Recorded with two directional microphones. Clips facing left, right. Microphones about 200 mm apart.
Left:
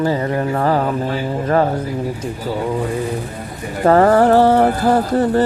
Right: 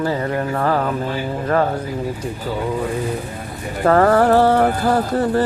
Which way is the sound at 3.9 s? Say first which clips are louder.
Left 2 dB; 20° left (ahead or behind).